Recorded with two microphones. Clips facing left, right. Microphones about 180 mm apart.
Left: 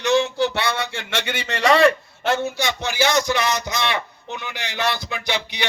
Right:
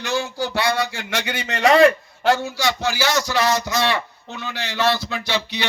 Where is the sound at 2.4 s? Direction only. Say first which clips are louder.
Right 1 dB; 20° left (ahead or behind).